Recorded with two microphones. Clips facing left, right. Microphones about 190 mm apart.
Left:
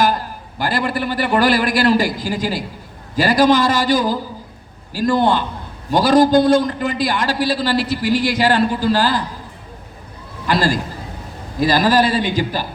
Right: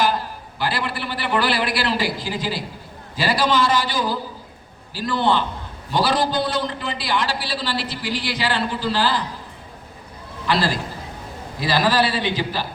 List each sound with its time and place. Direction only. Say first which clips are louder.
0.6 s a man's voice: left 5 dB; 45° left (ahead or behind)
10.4 s a man's voice: left 4 dB; 45° left (ahead or behind)